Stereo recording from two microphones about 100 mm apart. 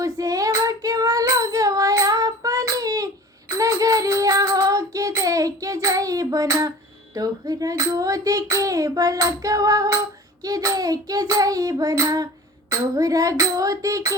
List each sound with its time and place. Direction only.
0.0 s child singing: 35° right (ahead or behind)